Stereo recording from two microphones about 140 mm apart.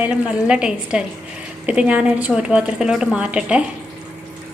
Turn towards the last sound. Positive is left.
turn(degrees=-10)  # may be behind; listen again after turning